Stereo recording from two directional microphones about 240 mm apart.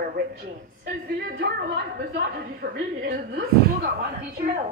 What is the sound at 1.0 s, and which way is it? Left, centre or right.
Speech, right.